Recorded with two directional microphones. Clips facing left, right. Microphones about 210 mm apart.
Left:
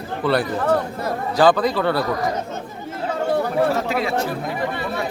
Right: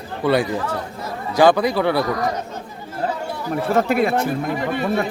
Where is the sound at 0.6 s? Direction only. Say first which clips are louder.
Left 6 dB; 55° left (ahead or behind).